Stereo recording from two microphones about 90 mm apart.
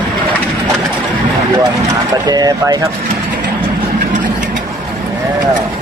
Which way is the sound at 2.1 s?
45° right (ahead or behind).